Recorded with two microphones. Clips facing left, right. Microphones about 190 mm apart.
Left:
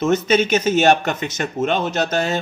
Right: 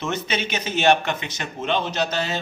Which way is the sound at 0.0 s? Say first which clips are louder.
Left 10 dB; 45° left (ahead or behind).